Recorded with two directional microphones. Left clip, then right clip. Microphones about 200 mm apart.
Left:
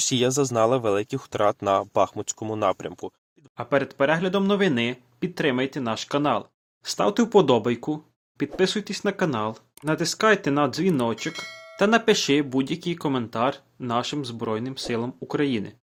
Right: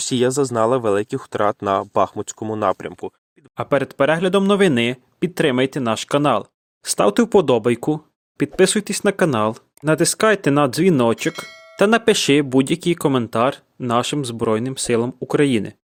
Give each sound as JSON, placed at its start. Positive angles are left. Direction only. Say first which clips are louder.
{"t": 0.0, "sound": "speech", "louder": "right 4 dB", "side_deg": -10}
{"t": 2.8, "sound": "speech", "louder": "right 4 dB", "side_deg": 0}
{"t": 3.6, "sound": "speech", "louder": "right 5 dB", "side_deg": -55}
{"t": 11.3, "sound": "speech", "louder": "right 7 dB", "side_deg": 0}
{"t": 11.8, "sound": "speech", "louder": "right 5 dB", "side_deg": -55}